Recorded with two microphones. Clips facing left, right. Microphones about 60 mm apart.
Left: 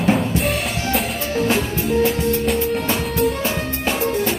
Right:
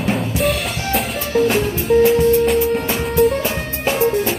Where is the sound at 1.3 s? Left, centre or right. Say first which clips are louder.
Right 6 dB; right.